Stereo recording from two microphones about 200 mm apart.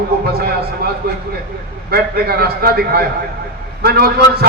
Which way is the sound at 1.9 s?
50° right (ahead or behind).